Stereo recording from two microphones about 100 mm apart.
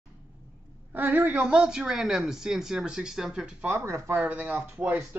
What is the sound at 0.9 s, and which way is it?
Speech, 20° right (ahead or behind).